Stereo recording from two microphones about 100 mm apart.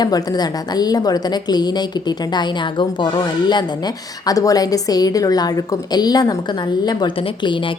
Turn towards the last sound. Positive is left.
turn(degrees=55)  # may be behind; listen again after turning